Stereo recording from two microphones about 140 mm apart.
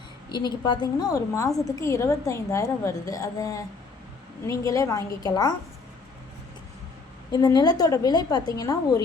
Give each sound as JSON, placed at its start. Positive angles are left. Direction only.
{"t": 0.3, "sound": "a woman's voice", "side_deg": 30}
{"t": 7.3, "sound": "a woman's voice", "side_deg": 30}